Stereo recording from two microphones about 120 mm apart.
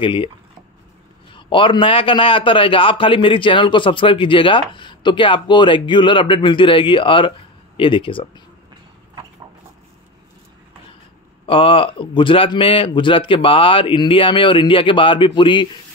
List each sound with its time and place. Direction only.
0.0 s a man's voice: 45° left (ahead or behind)
1.3 s a man's voice: 45° left (ahead or behind)
11.4 s a man's voice: 45° left (ahead or behind)